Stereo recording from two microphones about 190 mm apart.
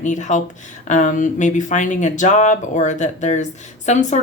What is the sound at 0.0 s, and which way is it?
Speech, 40° left (ahead or behind).